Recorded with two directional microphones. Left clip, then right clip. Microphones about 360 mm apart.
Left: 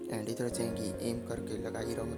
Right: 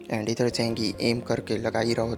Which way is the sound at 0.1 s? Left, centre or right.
Left.